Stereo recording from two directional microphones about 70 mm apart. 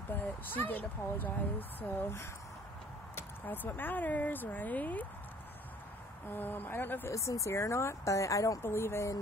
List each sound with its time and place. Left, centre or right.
0.1 s speech: left
6.2 s speech: left
7.1 s speech: left
8.6 s speech: left